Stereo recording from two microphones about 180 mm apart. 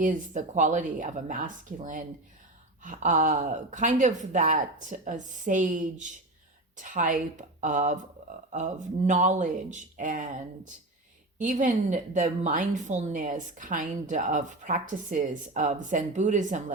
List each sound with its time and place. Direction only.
0.0 s a woman's voice: 45° right (ahead or behind)